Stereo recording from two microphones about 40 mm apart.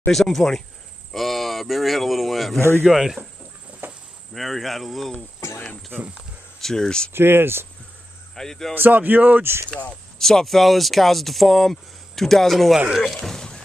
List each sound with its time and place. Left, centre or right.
0.1 s speech: centre
3.8 s cricket: right
4.3 s speech: centre
6.6 s speech: centre
7.1 s speech: right
8.4 s speech: centre
8.7 s speech: right
10.1 s speech: centre